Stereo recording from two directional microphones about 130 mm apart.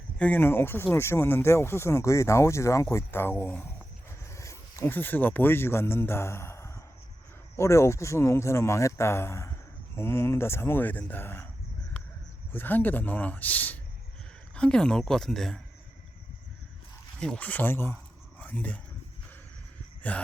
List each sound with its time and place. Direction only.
0.2 s speech: 15° left (ahead or behind)
12.5 s speech: 15° left (ahead or behind)
17.2 s speech: 10° left (ahead or behind)
18.3 s a sound: 10° left (ahead or behind)
20.0 s speech: 10° left (ahead or behind)